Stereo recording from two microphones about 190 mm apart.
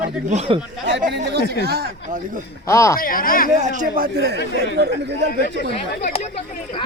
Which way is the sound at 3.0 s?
50° left (ahead or behind).